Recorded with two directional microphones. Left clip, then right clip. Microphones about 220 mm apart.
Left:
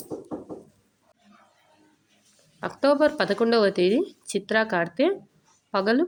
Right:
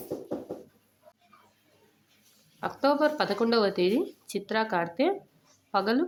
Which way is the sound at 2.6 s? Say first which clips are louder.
Left 4 dB; 15° left (ahead or behind).